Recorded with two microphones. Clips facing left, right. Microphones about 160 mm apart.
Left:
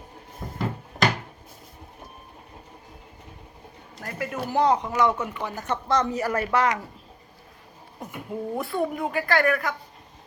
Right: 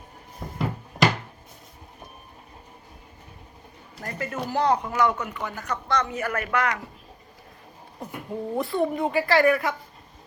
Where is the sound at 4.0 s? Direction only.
5° left (ahead or behind).